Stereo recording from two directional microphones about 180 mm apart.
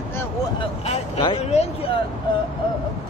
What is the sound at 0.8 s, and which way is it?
Speech, 35° left (ahead or behind).